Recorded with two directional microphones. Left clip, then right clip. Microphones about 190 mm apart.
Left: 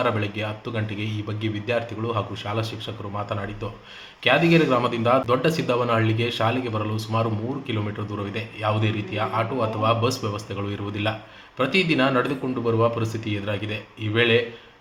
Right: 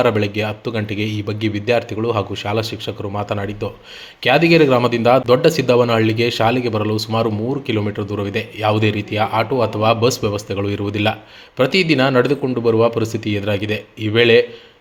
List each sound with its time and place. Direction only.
0.0 s speech: 45° right (ahead or behind)